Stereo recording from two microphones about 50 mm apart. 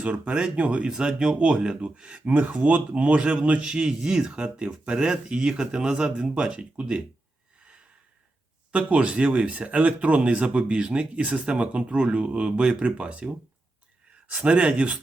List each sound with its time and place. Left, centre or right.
0.0 s speech: right
8.7 s speech: right
14.3 s speech: right